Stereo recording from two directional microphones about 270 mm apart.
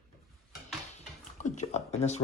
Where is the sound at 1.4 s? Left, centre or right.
Left.